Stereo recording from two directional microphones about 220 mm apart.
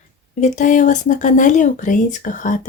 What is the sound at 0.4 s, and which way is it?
Speech, 35° left (ahead or behind).